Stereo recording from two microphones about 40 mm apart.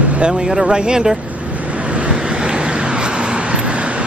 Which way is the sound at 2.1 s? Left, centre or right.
Right.